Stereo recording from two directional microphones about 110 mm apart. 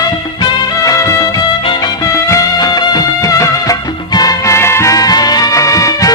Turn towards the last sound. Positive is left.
turn(degrees=30)  # may be behind; listen again after turning